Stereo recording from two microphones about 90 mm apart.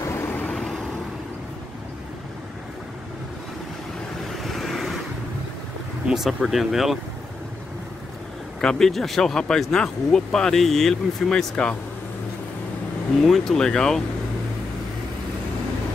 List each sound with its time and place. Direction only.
0.0 s vehicle: 30° left (ahead or behind)
0.4 s vehicle: 5° left (ahead or behind)
4.4 s vehicle: centre (ahead or behind)
6.0 s speech: 5° right (ahead or behind)
8.5 s speech: 5° left (ahead or behind)
13.2 s speech: 5° left (ahead or behind)